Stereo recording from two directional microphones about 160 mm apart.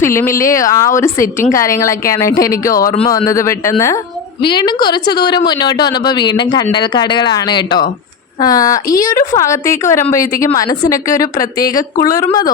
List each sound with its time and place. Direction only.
0.0 s a woman's voice: 15° left (ahead or behind)
4.4 s a woman's voice: 30° left (ahead or behind)